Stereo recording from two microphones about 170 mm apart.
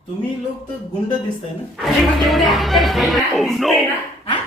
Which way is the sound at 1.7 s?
Centre (ahead or behind).